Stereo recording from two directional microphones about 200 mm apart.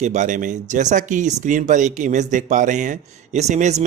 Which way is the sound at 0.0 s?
35° right (ahead or behind).